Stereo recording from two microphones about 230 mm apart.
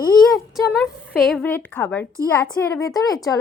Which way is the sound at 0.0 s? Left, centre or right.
Centre.